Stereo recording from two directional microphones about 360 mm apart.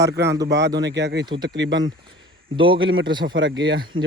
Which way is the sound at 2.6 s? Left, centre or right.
Centre.